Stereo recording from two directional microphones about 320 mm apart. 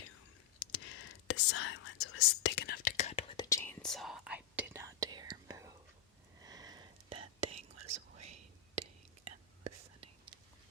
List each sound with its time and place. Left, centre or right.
0.6 s whispering: left; by 7.6 s centre
7.8 s whispering: right
8.2 s whispering: centre